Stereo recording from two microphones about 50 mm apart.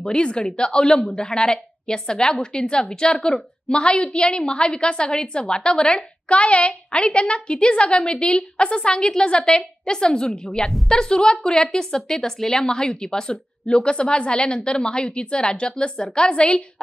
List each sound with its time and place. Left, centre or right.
0.0 s a woman's voice: centre